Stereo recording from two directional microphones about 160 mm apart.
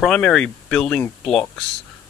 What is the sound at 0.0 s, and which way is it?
Speech, 5° left (ahead or behind).